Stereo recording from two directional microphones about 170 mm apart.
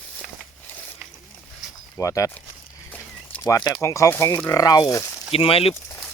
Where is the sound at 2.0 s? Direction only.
20° left (ahead or behind).